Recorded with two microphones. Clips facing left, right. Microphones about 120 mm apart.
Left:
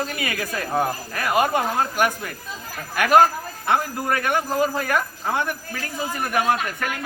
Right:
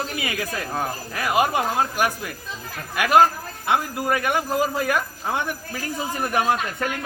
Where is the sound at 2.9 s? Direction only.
10° right (ahead or behind).